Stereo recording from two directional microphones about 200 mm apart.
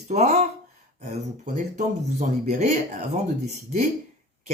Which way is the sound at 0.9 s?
35° right (ahead or behind).